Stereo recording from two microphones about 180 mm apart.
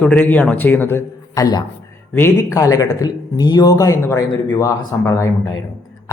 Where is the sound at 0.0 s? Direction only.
10° left (ahead or behind).